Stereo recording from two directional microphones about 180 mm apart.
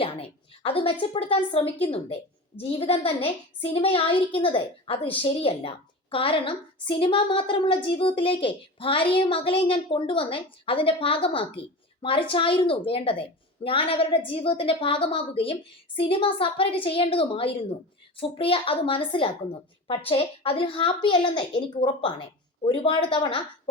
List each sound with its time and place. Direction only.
0.0 s a woman's voice: 30° left (ahead or behind)